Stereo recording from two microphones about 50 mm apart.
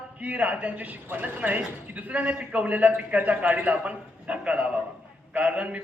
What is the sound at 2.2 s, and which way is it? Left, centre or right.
A man's voice, right.